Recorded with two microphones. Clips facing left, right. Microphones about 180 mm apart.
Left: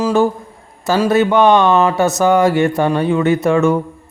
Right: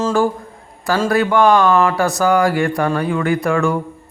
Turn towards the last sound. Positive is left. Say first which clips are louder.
# left 4 dB
turn(degrees=20)  # may be behind; listen again after turning